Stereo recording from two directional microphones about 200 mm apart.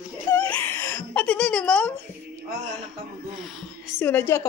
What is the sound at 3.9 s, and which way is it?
Speech, 10° left (ahead or behind).